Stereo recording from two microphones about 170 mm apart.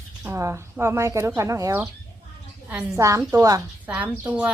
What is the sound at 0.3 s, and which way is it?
A woman's voice, 15° right (ahead or behind).